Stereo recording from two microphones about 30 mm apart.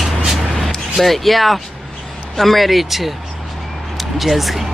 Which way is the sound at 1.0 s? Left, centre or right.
Centre.